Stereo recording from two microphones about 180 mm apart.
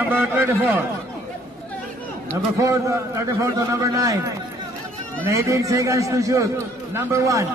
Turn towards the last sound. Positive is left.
turn(degrees=-15)  # may be behind; listen again after turning